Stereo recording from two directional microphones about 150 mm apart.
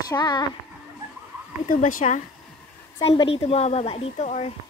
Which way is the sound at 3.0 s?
35° left (ahead or behind).